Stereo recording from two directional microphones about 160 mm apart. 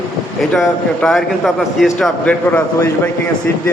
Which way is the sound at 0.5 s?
Centre (ahead or behind).